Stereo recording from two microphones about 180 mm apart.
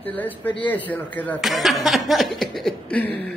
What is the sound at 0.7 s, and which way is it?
A man's voice, 10° left (ahead or behind).